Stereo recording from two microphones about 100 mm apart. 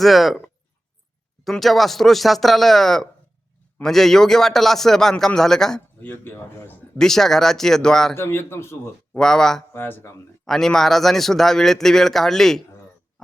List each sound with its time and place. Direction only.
0.0 s speech: centre (ahead or behind)
1.5 s speech: centre (ahead or behind)
6.0 s a man's voice: 20° left (ahead or behind)
7.0 s speech: 5° left (ahead or behind)
8.1 s a man's voice: 25° left (ahead or behind)
9.1 s speech: 5° left (ahead or behind)
9.7 s a man's voice: 20° left (ahead or behind)
10.4 s speech: 5° left (ahead or behind)